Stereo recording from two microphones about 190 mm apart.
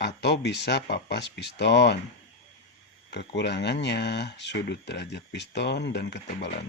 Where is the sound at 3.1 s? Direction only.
65° left (ahead or behind).